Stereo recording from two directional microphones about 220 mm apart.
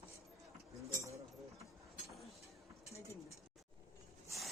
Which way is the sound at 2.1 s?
Centre (ahead or behind).